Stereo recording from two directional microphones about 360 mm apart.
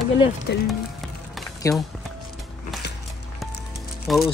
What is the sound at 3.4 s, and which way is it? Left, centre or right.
Music, centre.